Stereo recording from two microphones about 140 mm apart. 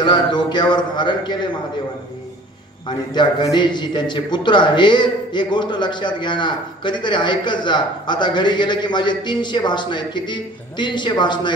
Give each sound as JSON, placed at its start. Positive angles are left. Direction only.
{"t": 0.0, "sound": "a man's voice", "side_deg": 30}
{"t": 2.9, "sound": "a man's voice", "side_deg": 30}